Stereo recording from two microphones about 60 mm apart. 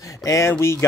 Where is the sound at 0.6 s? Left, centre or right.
Left.